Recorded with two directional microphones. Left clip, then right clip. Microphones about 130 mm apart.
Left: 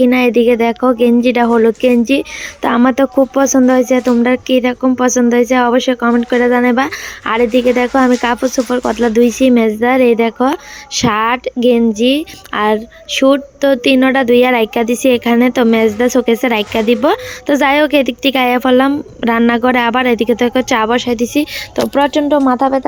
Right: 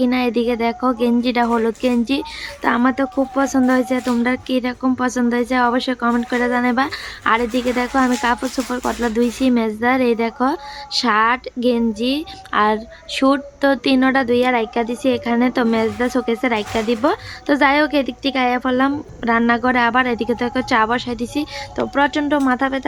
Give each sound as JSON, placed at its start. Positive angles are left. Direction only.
{"t": 0.0, "sound": "speech", "side_deg": 20}
{"t": 2.6, "sound": "speech", "side_deg": 25}